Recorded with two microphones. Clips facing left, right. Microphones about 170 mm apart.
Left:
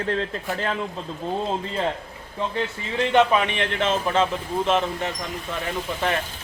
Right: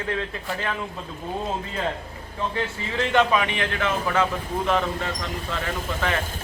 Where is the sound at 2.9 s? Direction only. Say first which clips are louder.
Left 2 dB; 20° left (ahead or behind).